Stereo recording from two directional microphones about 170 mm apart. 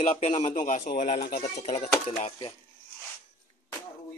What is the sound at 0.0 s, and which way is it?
Speech, 40° left (ahead or behind).